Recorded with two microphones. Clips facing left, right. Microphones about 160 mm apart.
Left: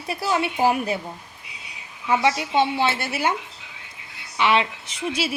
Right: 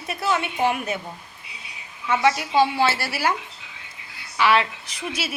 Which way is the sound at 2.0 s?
25° left (ahead or behind).